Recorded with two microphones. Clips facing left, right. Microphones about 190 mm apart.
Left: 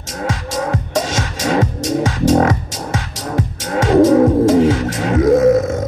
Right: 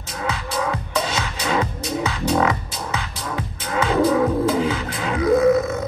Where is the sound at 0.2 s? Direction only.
45° left (ahead or behind).